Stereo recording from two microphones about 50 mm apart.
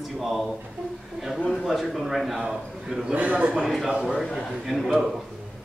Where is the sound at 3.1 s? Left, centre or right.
Right.